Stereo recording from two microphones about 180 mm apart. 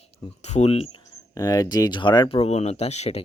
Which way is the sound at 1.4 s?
20° left (ahead or behind).